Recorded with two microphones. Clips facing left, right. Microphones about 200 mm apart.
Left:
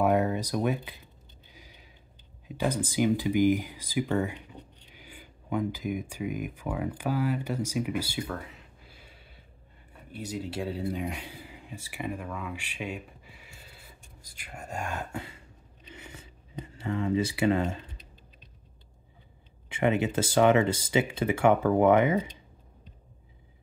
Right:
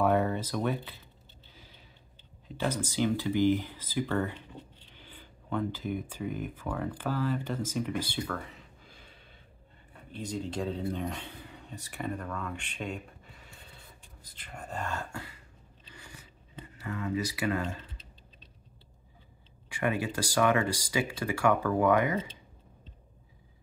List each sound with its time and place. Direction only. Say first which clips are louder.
0.0 s a sound: left 2 dB; 10° left (ahead or behind)
2.4 s speech: left 3 dB; 15° left (ahead or behind)
10.1 s speech: even; 5° left (ahead or behind)
15.9 s a sound: left 5 dB; 25° left (ahead or behind)
16.7 s speech: left 5 dB; 25° left (ahead or behind)
19.7 s speech: left 5 dB; 25° left (ahead or behind)